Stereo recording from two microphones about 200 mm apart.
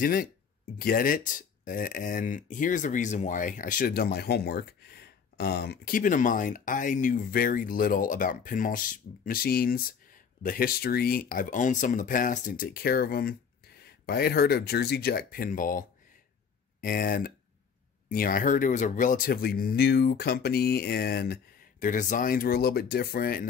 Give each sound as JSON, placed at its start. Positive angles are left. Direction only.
{"t": 0.0, "sound": "speech", "side_deg": 45}
{"t": 16.8, "sound": "speech", "side_deg": 45}